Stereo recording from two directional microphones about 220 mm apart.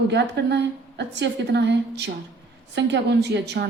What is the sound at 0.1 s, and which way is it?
A woman's voice, 50° right (ahead or behind).